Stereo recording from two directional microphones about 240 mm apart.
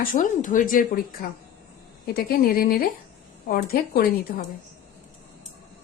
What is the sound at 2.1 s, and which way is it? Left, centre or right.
Speech, left.